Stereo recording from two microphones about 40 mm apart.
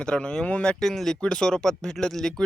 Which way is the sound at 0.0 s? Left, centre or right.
Left.